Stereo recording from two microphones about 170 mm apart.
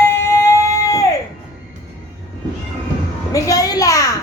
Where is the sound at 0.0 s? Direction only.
15° left (ahead or behind).